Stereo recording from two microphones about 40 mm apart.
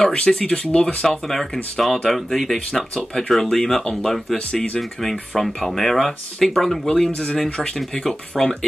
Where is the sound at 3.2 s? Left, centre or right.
Centre.